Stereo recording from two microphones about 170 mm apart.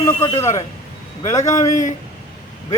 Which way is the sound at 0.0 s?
20° left (ahead or behind).